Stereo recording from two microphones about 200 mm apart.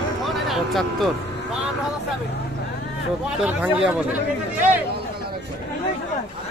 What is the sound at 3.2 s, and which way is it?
Speech, 5° right (ahead or behind).